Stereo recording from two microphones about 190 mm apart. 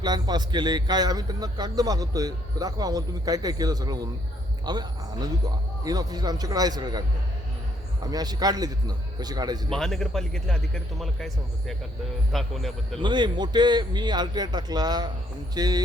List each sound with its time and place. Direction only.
0.0 s a man's voice: 20° right (ahead or behind)
8.0 s a man's voice: 20° right (ahead or behind)
9.6 s speech: centre (ahead or behind)
13.0 s a man's voice: 25° right (ahead or behind)